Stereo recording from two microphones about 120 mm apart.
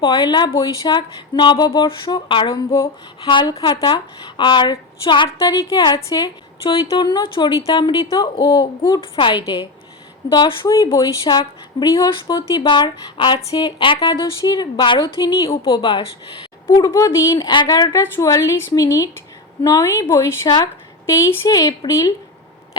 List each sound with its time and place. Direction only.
0.0 s speech: 40° left (ahead or behind)
5.4 s a woman's voice: 25° left (ahead or behind)
15.4 s speech: 50° left (ahead or behind)
16.6 s a woman's voice: 30° left (ahead or behind)
21.8 s a woman's voice: 25° left (ahead or behind)